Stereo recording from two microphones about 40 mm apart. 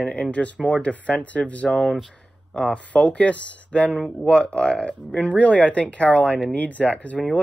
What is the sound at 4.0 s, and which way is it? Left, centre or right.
Speech, left.